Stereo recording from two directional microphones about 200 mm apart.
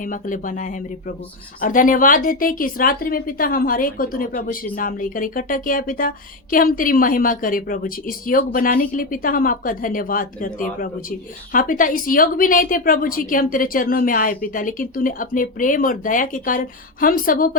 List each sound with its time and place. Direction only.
0.0 s speech: 40° left (ahead or behind)